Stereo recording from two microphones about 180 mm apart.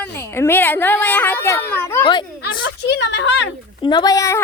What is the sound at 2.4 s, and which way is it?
A woman's voice, 70° left (ahead or behind).